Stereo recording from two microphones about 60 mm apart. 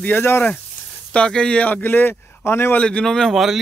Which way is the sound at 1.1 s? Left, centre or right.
Centre.